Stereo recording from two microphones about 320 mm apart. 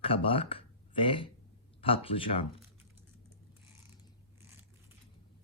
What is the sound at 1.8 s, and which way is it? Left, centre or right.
Speech, centre.